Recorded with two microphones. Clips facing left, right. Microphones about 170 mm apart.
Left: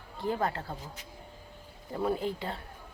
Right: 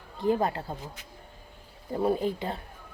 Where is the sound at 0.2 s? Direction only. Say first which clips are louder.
Right 5 dB; 20° right (ahead or behind).